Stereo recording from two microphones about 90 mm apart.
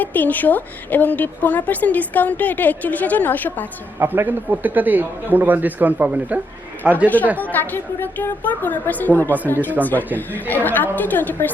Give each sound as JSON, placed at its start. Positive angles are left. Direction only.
{"t": 0.0, "sound": "a woman's voice", "side_deg": 20}
{"t": 4.0, "sound": "a man's voice", "side_deg": -20}
{"t": 7.5, "sound": "a woman's voice", "side_deg": 20}